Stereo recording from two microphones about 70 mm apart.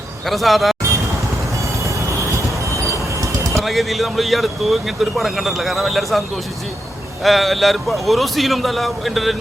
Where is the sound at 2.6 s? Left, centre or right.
Right.